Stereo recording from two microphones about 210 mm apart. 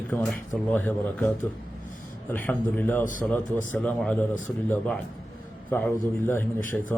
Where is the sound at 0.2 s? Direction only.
5° left (ahead or behind).